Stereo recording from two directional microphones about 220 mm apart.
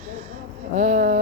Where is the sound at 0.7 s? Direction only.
35° right (ahead or behind).